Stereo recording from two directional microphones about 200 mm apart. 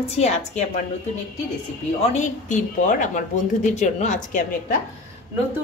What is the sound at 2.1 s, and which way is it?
A woman's voice, 40° left (ahead or behind).